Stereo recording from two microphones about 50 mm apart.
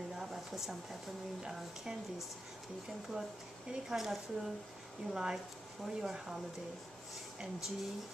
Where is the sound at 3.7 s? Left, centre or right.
Centre.